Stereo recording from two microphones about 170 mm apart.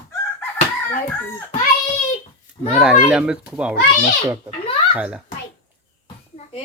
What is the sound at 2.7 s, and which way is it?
Speech, 5° right (ahead or behind).